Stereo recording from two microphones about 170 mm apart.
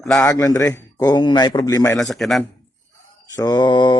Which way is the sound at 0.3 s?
20° left (ahead or behind).